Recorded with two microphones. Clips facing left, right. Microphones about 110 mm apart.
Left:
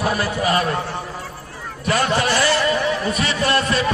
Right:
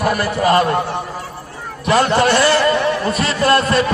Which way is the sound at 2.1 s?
60° right (ahead or behind).